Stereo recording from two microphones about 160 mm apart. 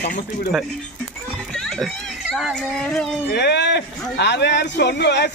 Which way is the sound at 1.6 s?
Centre (ahead or behind).